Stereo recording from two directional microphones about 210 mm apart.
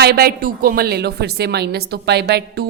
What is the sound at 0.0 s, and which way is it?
A woman's voice, 50° right (ahead or behind).